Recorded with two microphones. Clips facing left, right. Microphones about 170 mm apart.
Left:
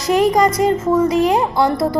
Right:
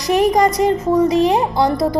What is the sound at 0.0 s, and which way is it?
A child's voice, 20° right (ahead or behind).